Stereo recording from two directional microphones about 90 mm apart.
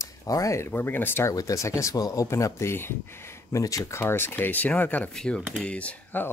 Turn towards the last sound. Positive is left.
turn(degrees=15)  # may be behind; listen again after turning